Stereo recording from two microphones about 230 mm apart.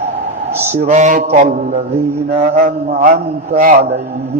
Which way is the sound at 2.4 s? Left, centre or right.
Right.